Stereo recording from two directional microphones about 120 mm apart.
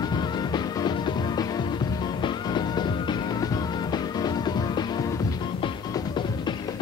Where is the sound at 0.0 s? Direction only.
35° left (ahead or behind).